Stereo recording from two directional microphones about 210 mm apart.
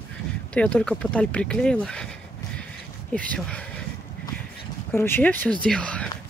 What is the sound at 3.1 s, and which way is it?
Speech, 5° left (ahead or behind).